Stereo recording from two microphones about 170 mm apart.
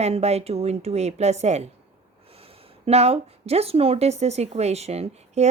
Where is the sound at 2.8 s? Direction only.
40° right (ahead or behind).